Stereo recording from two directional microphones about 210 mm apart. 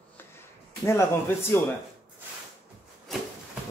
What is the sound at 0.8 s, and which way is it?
Speech, 10° left (ahead or behind).